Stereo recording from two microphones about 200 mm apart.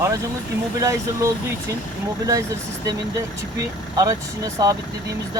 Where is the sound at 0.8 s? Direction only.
15° right (ahead or behind).